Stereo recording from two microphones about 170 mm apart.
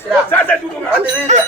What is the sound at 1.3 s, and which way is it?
Speech, 45° right (ahead or behind).